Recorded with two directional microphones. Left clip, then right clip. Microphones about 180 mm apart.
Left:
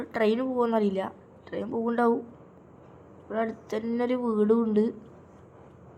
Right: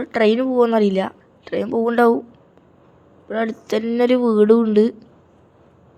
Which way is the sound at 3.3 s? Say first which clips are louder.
Right 8 dB; 35° right (ahead or behind).